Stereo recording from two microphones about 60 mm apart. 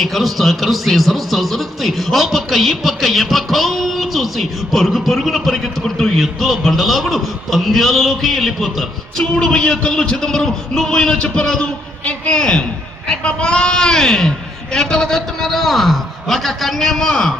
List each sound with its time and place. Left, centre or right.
0.0 s a man's voice: centre